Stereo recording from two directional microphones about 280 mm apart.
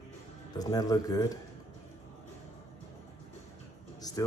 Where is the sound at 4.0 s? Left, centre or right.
Centre.